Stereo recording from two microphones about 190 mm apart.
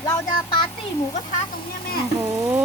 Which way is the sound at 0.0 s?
20° left (ahead or behind).